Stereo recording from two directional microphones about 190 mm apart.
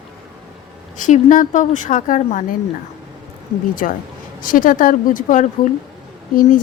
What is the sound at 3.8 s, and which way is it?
Speech, 40° left (ahead or behind).